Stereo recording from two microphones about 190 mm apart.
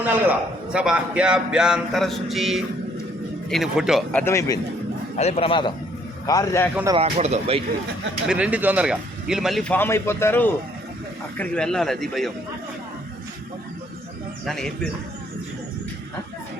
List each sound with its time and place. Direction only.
0.0 s speech: 10° right (ahead or behind)
4.2 s speech: 15° left (ahead or behind)
5.1 s a man's voice: 35° left (ahead or behind); by 6.7 s 15° left (ahead or behind)
6.9 s speech: 35° right (ahead or behind)
8.3 s speech: 5° right (ahead or behind)
14.4 s speech: 5° left (ahead or behind)